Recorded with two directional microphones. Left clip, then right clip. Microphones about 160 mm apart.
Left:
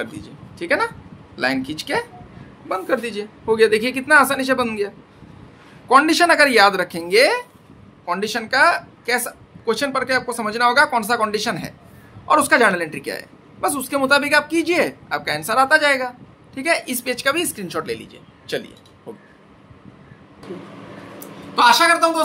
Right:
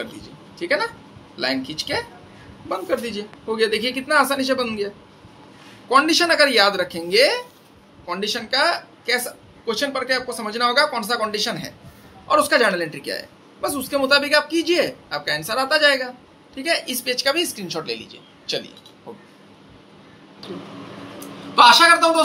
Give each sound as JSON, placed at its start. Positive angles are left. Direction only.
{"t": 0.6, "sound": "a man's voice", "side_deg": 90}
{"t": 2.7, "sound": "a man's voice", "side_deg": 80}
{"t": 13.0, "sound": "a woman's voice", "side_deg": 90}
{"t": 21.2, "sound": "a man's voice", "side_deg": 10}